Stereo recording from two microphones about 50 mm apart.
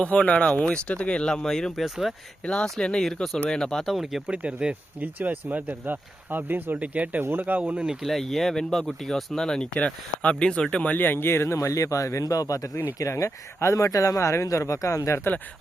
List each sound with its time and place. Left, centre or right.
0.0 s speech: left; by 1.8 s centre
1.8 s speech: centre
2.4 s speech: centre
3.8 s speech: centre
4.3 s speech: right
4.9 s speech: right
6.7 s speech: right
7.2 s speech: right
8.0 s speech: centre
10.9 s speech: left
11.5 s speech: left